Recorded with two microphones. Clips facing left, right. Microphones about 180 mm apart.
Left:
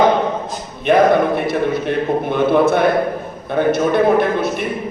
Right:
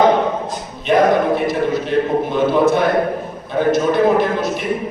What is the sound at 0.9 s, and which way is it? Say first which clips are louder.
A man's voice: left 1 dB; 60° left (ahead or behind).